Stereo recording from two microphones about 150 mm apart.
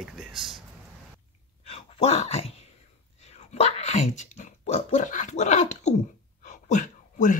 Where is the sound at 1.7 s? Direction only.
40° left (ahead or behind).